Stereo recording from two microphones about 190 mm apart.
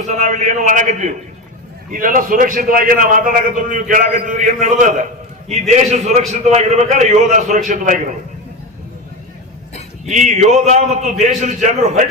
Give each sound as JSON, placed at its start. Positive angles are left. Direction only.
{"t": 0.0, "sound": "a man's voice", "side_deg": -40}
{"t": 10.1, "sound": "a man's voice", "side_deg": -40}